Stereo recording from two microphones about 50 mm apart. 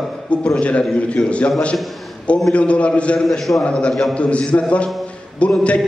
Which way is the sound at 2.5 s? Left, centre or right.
Left.